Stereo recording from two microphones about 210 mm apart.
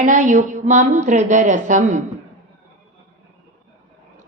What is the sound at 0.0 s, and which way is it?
A woman's voice, 35° right (ahead or behind).